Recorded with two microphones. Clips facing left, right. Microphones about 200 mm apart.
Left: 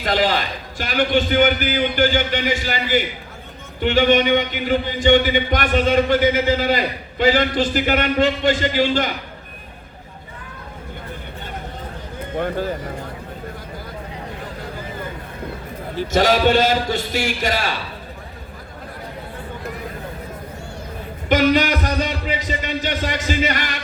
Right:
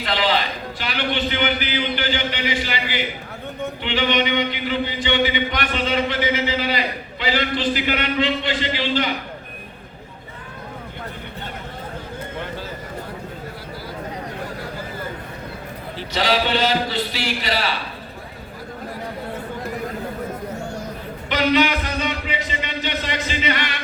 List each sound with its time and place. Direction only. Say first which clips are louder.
0.0 s a man's voice: left 2 dB; 45° left (ahead or behind)
16.0 s speech: left 5 dB; 45° left (ahead or behind)
21.2 s a sound: left 2 dB; 45° left (ahead or behind)